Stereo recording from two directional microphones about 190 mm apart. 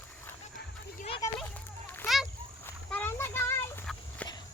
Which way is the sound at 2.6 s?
10° left (ahead or behind).